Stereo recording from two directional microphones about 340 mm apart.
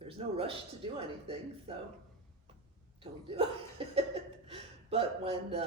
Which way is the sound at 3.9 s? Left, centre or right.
Centre.